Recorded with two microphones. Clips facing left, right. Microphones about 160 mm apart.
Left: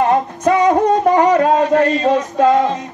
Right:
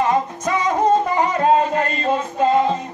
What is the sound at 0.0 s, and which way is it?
Music, 60° left (ahead or behind).